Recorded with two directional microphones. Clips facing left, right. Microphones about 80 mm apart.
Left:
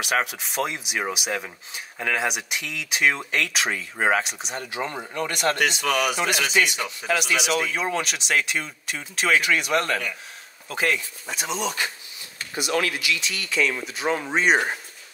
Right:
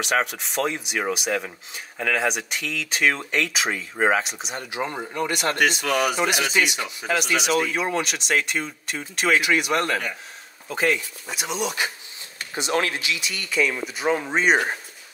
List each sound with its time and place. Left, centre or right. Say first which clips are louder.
0.0 s speech: right 1 dB; centre
4.6 s speech: right 3 dB; centre
5.6 s speech: right 2 dB; right
7.1 s speech: right 1 dB; centre
12.5 s speech: right 1 dB; right
13.2 s speech: right 3 dB; centre